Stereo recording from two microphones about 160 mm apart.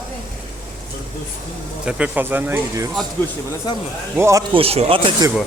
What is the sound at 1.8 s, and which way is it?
Speech, 5° right (ahead or behind).